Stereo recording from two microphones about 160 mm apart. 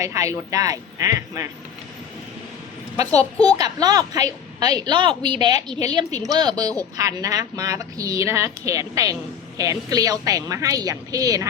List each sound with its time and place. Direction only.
0.0 s a woman's voice: 20° right (ahead or behind)
3.3 s a child's voice: 10° left (ahead or behind)
3.6 s a woman's voice: 25° right (ahead or behind)